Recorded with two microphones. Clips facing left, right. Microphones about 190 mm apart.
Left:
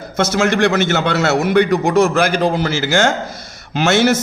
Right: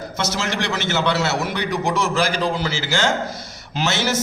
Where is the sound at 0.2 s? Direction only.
50° left (ahead or behind).